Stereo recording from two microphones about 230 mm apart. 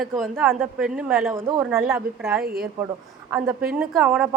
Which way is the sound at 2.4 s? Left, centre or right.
Right.